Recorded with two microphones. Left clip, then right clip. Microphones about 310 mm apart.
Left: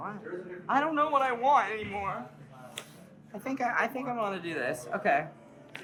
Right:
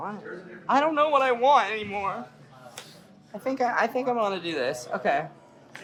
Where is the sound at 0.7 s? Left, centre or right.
Right.